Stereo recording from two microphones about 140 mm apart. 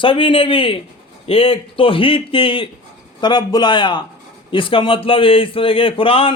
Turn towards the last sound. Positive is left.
turn(degrees=40)  # may be behind; listen again after turning